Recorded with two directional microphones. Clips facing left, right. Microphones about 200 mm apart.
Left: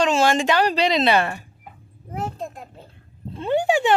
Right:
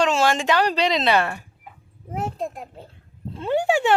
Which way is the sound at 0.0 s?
Centre (ahead or behind).